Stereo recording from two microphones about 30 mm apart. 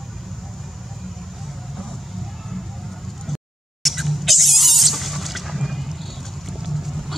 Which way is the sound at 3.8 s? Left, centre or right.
Centre.